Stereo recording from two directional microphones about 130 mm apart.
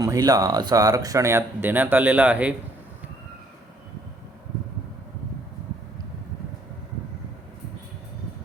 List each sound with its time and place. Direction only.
0.0 s speech: 25° right (ahead or behind); by 2.6 s 10° right (ahead or behind)